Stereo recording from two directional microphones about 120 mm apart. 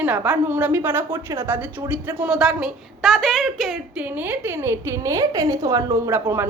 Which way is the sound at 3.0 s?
5° left (ahead or behind).